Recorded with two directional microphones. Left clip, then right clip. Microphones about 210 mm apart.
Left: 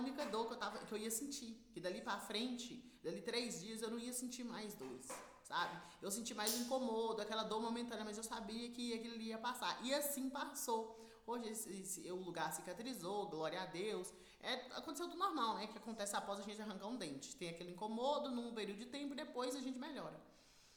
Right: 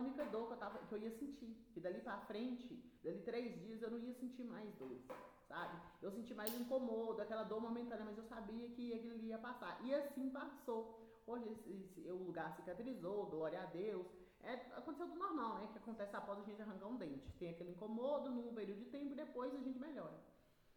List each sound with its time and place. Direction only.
0.0 s speech: 25° left (ahead or behind)